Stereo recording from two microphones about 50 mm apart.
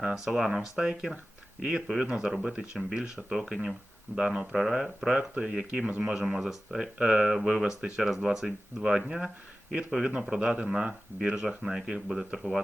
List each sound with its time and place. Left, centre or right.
0.3 s speech: centre